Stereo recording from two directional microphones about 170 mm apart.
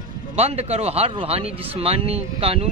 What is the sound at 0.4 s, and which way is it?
Speech, 35° right (ahead or behind).